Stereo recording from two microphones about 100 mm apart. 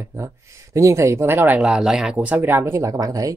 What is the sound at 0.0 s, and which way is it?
Speech, 30° right (ahead or behind).